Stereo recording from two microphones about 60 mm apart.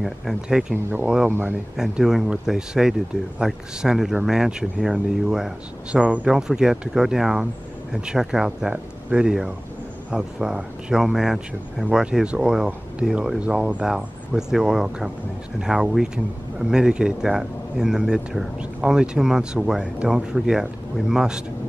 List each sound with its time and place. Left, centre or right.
0.0 s speech: centre
6.3 s speech: centre
13.8 s speech: centre